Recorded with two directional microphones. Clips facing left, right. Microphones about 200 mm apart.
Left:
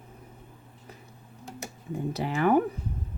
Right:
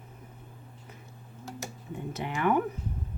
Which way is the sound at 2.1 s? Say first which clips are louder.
Left 4 dB; 35° left (ahead or behind).